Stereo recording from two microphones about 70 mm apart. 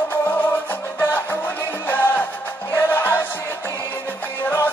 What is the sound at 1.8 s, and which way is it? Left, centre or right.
Music, left.